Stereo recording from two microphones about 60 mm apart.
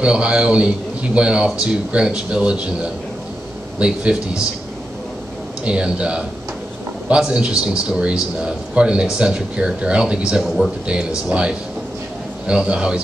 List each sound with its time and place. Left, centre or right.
0.0 s a man's voice: centre
5.7 s a man's voice: centre